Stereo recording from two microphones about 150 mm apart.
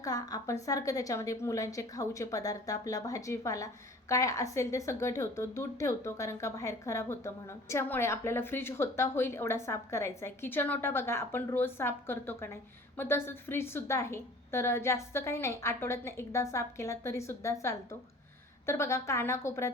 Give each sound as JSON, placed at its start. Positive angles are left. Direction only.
{"t": 0.0, "sound": "a woman's voice", "side_deg": 25}